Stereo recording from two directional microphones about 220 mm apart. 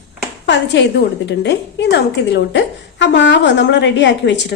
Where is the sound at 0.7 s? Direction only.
55° left (ahead or behind).